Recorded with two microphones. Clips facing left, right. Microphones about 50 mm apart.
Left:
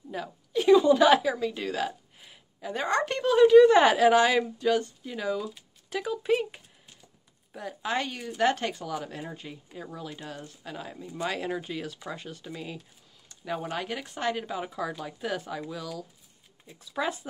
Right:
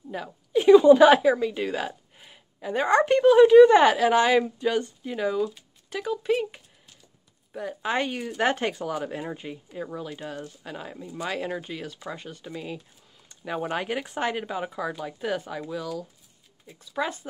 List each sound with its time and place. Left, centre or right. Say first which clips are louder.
0.1 s a woman's voice: right 5 dB; centre
7.5 s speech: right 3 dB; centre
13.4 s speech: right 3 dB; centre